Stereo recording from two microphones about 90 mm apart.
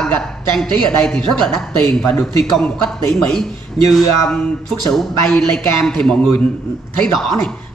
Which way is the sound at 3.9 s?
5° left (ahead or behind).